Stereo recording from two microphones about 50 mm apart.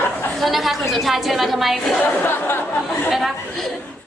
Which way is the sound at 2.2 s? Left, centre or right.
Left.